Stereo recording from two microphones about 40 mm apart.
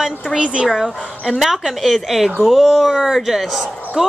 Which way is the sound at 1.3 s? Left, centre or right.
Centre.